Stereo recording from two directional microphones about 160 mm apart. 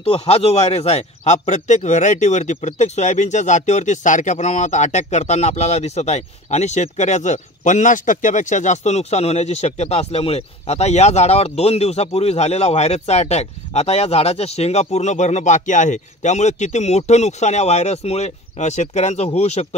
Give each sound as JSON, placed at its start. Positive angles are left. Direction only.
{"t": 0.0, "sound": "a man's voice", "side_deg": 40}